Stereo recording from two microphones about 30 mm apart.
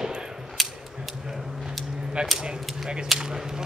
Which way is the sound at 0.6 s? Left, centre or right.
Centre.